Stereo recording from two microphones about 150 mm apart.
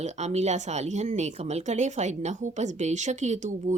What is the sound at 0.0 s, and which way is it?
Speech, 50° right (ahead or behind).